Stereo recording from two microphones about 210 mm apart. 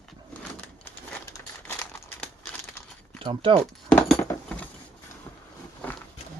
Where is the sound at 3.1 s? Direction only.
25° right (ahead or behind).